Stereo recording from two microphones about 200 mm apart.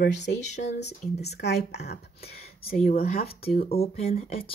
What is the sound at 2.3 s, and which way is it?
Speech, 30° left (ahead or behind).